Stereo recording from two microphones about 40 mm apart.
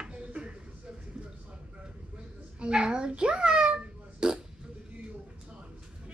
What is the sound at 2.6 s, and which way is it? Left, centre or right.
Fart, right.